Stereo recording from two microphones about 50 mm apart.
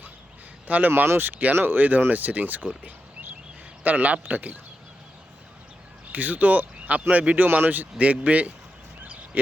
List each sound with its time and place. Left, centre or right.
0.7 s speech: right
6.1 s speech: right